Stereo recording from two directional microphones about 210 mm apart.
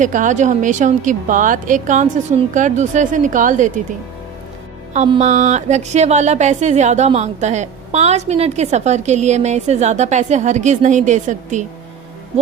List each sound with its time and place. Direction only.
0.0 s speech: 35° right (ahead or behind)
4.9 s speech: 30° right (ahead or behind)